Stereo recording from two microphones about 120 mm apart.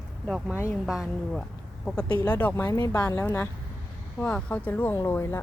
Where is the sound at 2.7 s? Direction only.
30° left (ahead or behind).